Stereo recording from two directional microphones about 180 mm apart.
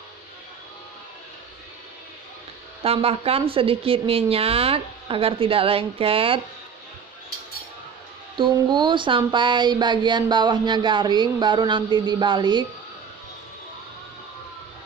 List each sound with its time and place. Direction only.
2.8 s a woman's voice: 35° right (ahead or behind)
8.4 s speech: 25° right (ahead or behind)